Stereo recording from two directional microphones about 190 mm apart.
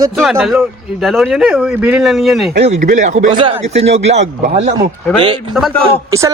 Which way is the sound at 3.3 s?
30° right (ahead or behind).